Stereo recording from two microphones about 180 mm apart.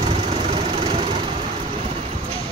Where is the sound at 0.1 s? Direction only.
35° right (ahead or behind).